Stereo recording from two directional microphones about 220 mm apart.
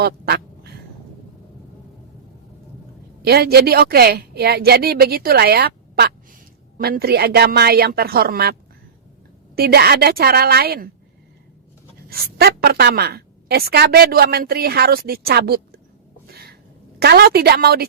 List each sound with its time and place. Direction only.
0.0 s quack: 45° right (ahead or behind)
3.2 s a woman's voice: 45° right (ahead or behind)
9.6 s a woman's voice: 45° right (ahead or behind)
12.0 s a woman's voice: 45° right (ahead or behind)
16.2 s a sound: 45° right (ahead or behind)
17.0 s a woman's voice: 45° right (ahead or behind)